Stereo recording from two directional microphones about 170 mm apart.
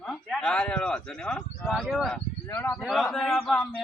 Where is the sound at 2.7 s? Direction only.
Centre (ahead or behind).